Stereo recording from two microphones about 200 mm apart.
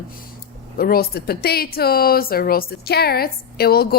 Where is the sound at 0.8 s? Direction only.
50° left (ahead or behind).